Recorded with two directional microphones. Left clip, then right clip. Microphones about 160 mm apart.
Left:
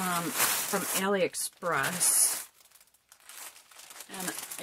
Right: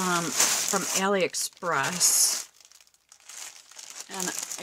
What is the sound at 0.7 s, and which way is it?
Speech, 25° right (ahead or behind).